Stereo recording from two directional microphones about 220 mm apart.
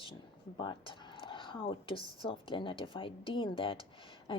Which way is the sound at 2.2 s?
25° left (ahead or behind).